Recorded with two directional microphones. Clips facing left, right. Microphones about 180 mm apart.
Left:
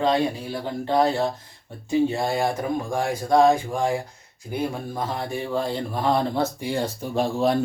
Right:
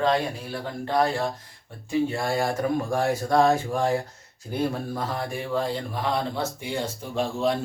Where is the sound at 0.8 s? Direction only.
25° left (ahead or behind).